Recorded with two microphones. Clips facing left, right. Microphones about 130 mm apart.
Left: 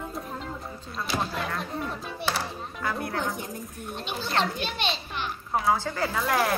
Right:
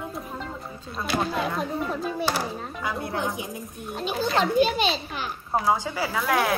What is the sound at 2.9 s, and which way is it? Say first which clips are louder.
Speech: right 2 dB; 25° right (ahead or behind).